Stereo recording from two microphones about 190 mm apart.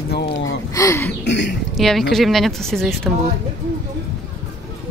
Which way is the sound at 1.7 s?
Centre (ahead or behind).